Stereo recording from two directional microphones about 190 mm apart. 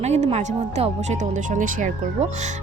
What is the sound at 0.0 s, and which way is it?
Speech, 35° right (ahead or behind).